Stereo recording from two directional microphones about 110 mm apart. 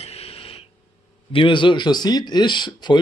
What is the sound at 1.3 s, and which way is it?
Speech, 50° left (ahead or behind).